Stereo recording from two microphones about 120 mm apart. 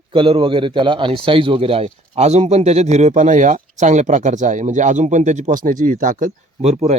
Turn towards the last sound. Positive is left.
turn(degrees=-70)  # may be behind; listen again after turning